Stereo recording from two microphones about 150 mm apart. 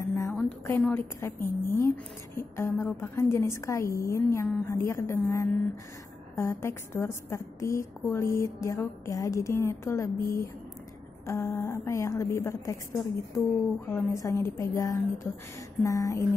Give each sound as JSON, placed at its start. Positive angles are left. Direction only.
{"t": 0.0, "sound": "a sound", "side_deg": 20}
{"t": 0.4, "sound": "a woman's voice", "side_deg": 10}
{"t": 11.2, "sound": "a woman's voice", "side_deg": 20}